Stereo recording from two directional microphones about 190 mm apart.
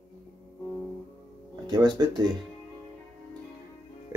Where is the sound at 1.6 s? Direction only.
20° right (ahead or behind).